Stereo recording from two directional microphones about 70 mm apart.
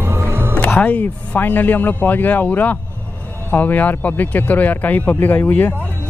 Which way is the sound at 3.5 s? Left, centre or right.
Left.